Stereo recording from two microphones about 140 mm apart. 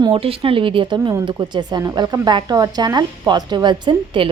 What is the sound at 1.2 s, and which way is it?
A woman's voice, 35° right (ahead or behind).